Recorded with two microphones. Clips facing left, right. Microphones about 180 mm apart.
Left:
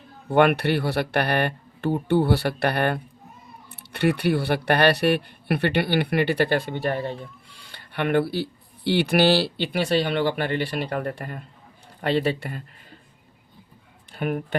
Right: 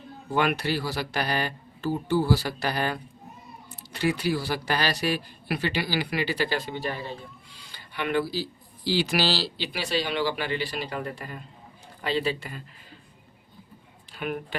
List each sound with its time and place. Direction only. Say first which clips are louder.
0.3 s speech: left 7 dB; 60° left (ahead or behind)
14.2 s speech: left 5 dB; 45° left (ahead or behind)